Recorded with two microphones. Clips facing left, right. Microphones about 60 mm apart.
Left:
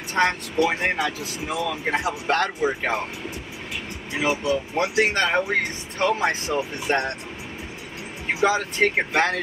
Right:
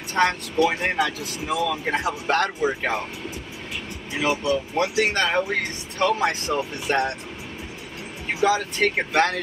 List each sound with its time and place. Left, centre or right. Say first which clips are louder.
0.1 s speech: even; centre
4.1 s speech: even; centre
4.9 s speech: left 2 dB; left
8.5 s speech: right 1 dB; left
8.8 s speech: even; centre